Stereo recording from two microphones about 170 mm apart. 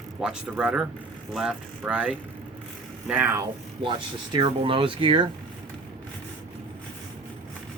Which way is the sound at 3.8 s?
30° right (ahead or behind).